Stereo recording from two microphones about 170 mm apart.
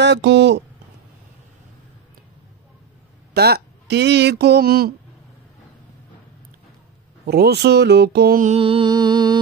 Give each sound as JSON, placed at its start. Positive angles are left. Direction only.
{"t": 0.0, "sound": "speech", "side_deg": -90}
{"t": 3.3, "sound": "speech", "side_deg": -70}
{"t": 7.2, "sound": "speech", "side_deg": -70}
{"t": 8.5, "sound": "music", "side_deg": -30}